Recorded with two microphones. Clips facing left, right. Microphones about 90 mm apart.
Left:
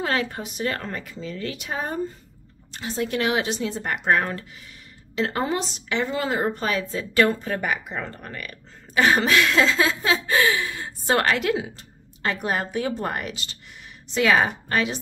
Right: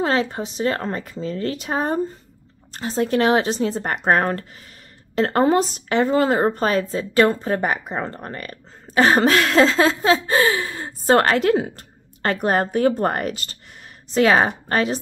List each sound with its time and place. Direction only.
0.0 s speech: 25° right (ahead or behind)